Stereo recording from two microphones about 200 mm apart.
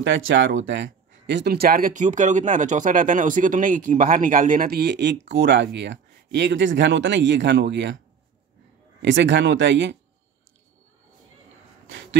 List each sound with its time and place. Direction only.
0.0 s speech: 70° right (ahead or behind)
9.0 s speech: 65° right (ahead or behind)